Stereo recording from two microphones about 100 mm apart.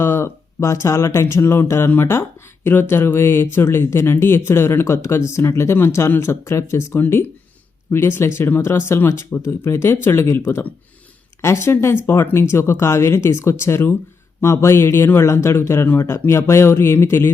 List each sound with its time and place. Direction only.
0.0 s speech: 25° left (ahead or behind)